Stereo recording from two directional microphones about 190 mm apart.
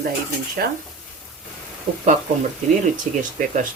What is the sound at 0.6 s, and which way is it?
Speech, 55° right (ahead or behind).